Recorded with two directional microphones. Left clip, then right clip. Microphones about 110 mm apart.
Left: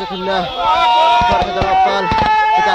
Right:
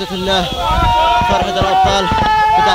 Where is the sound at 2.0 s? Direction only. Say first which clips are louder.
Even; 35° left (ahead or behind).